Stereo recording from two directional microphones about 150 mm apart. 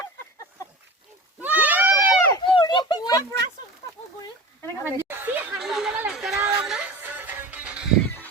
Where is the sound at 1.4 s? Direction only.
10° right (ahead or behind).